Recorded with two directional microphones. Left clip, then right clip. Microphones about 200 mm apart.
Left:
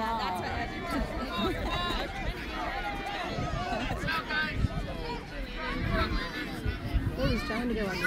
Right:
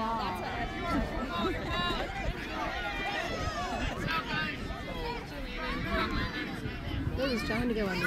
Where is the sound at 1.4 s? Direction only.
25° left (ahead or behind).